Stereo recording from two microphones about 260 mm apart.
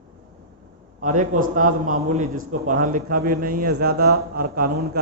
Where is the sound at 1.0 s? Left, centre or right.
Right.